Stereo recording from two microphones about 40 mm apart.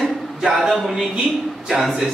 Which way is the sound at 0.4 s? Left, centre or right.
Centre.